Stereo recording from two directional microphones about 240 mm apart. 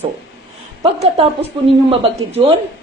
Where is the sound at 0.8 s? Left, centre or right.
Right.